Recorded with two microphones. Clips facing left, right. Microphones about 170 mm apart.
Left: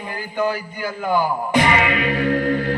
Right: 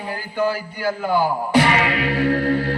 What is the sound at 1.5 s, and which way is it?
Music, 20° left (ahead or behind).